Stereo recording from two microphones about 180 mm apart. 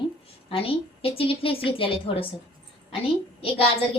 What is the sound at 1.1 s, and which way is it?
A woman's voice, 30° left (ahead or behind).